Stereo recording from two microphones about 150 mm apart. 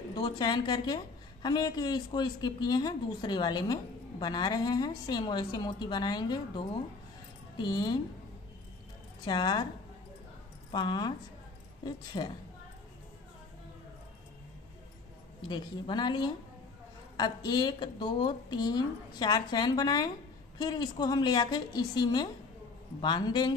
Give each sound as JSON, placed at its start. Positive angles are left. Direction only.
{"t": 0.1, "sound": "a woman's voice", "side_deg": 30}
{"t": 9.2, "sound": "a woman's voice", "side_deg": 30}
{"t": 10.7, "sound": "a woman's voice", "side_deg": 30}
{"t": 15.4, "sound": "a woman's voice", "side_deg": 30}